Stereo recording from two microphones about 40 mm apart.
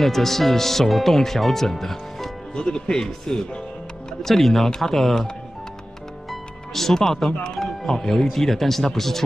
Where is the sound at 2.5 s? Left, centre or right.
Centre.